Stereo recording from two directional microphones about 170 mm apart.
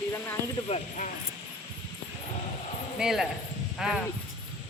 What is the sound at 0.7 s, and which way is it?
Speech, 45° left (ahead or behind).